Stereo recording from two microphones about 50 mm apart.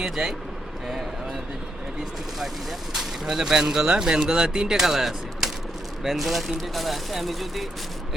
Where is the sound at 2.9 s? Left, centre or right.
Centre.